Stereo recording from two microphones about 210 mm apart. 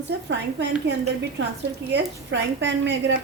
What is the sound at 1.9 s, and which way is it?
A woman's voice, 55° right (ahead or behind).